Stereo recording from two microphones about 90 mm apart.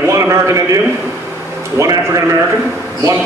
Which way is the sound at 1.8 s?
35° right (ahead or behind).